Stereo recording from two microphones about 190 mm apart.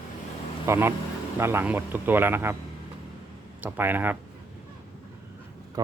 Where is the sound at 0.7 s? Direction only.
15° right (ahead or behind).